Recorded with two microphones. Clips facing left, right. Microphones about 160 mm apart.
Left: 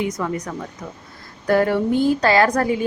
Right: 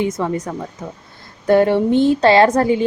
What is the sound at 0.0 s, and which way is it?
A woman's voice, 30° right (ahead or behind).